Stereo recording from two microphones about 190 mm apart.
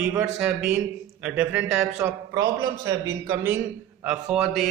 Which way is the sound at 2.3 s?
20° right (ahead or behind).